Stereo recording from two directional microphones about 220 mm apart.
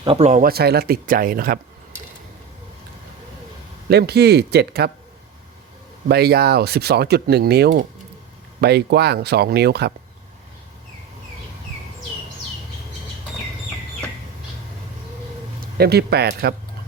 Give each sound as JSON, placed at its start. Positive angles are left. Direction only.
{"t": 0.0, "sound": "speech", "side_deg": -25}
{"t": 3.8, "sound": "speech", "side_deg": -45}
{"t": 6.1, "sound": "speech", "side_deg": -45}
{"t": 15.6, "sound": "speech", "side_deg": -45}